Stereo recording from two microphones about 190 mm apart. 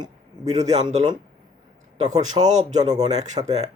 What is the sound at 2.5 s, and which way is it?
Speech, 40° right (ahead or behind).